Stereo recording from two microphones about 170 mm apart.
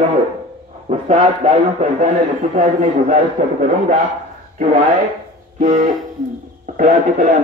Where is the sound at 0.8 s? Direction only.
35° right (ahead or behind).